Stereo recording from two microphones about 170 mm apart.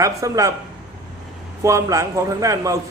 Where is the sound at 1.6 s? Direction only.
20° right (ahead or behind).